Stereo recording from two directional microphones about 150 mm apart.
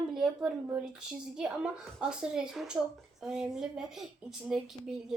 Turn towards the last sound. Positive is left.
turn(degrees=-5)  # may be behind; listen again after turning